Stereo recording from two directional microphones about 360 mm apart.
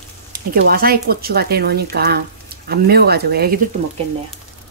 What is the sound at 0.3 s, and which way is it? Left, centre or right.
Speech, right.